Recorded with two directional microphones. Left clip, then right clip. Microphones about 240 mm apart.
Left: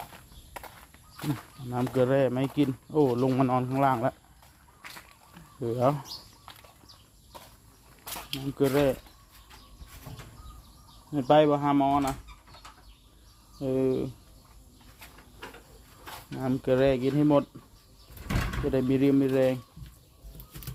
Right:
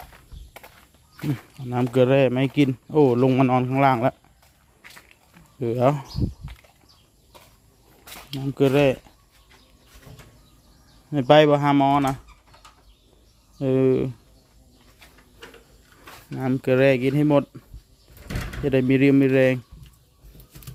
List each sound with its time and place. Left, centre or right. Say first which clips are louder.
0.5 s walk: left 2 dB; centre
1.7 s speech: right 6 dB; right
5.5 s speech: right 5 dB; right
8.5 s speech: right 6 dB; right
11.1 s speech: right 6 dB; right
13.6 s speech: right 7 dB; right
16.4 s speech: right 5 dB; right
18.7 s speech: right 7 dB; right